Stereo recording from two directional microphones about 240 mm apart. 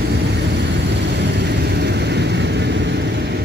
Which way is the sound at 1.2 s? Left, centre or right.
Right.